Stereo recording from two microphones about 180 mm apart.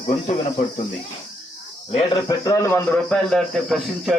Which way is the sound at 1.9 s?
25° left (ahead or behind).